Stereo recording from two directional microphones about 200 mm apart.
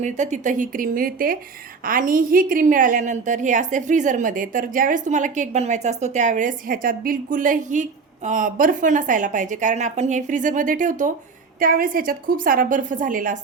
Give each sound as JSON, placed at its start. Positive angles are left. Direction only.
{"t": 0.0, "sound": "a woman's voice", "side_deg": -35}